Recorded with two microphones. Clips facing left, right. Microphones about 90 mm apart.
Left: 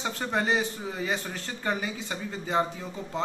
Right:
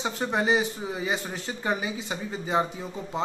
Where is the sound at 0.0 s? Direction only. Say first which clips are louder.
Right 2 dB; 15° right (ahead or behind).